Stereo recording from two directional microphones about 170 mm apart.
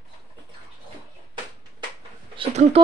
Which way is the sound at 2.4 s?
30° right (ahead or behind).